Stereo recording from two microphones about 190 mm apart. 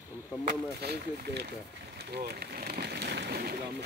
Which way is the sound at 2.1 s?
55° right (ahead or behind).